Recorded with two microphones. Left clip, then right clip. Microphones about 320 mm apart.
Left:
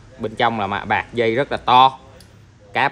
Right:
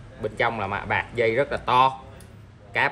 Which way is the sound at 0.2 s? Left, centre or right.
Left.